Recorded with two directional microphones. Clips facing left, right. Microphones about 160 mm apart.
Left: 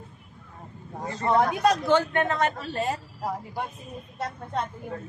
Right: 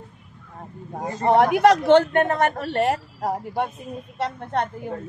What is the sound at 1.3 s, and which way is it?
A man's voice, 75° right (ahead or behind).